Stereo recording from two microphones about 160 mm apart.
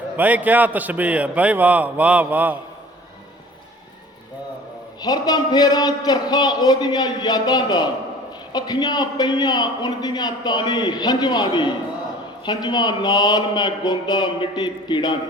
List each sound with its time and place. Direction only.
0.2 s a man's voice: 10° right (ahead or behind)
4.9 s a man's voice: 25° left (ahead or behind)